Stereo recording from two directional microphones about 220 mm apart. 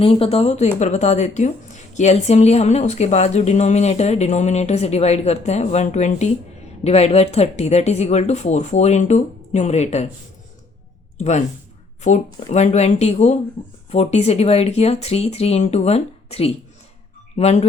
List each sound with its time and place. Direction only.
0.0 s a woman's voice: 25° left (ahead or behind)
11.2 s a woman's voice: 30° left (ahead or behind)